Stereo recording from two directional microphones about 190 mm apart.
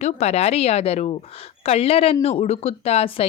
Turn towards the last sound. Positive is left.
turn(degrees=30)  # may be behind; listen again after turning